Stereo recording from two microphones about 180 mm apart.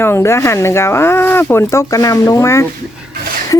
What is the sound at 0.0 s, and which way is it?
Speech, 15° left (ahead or behind).